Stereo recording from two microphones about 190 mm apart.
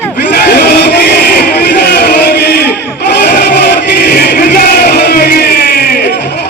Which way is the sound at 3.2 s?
55° left (ahead or behind).